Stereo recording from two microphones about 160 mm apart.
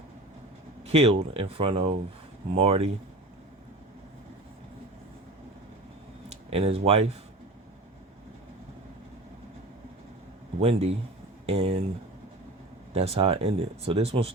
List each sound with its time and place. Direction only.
0.9 s speech: 40° right (ahead or behind)
6.2 s speech: 40° right (ahead or behind)
10.6 s speech: 40° right (ahead or behind)
12.9 s speech: 40° right (ahead or behind)